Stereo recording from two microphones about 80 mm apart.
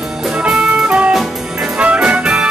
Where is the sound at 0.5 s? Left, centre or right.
Centre.